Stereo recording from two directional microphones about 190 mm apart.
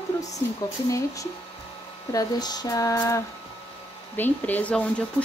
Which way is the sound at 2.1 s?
20° left (ahead or behind).